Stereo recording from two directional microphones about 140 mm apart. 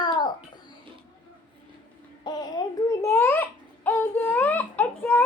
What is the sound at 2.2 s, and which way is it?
Babbling, 30° left (ahead or behind).